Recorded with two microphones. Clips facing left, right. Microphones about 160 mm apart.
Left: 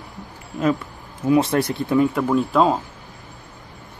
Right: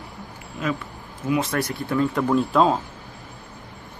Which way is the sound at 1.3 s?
30° left (ahead or behind).